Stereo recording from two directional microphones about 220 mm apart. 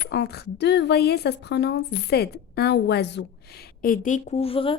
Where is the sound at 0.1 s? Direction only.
45° left (ahead or behind).